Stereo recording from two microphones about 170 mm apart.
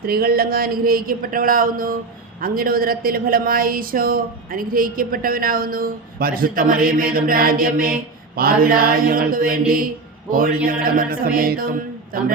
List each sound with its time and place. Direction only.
0.0 s speech: 60° right (ahead or behind)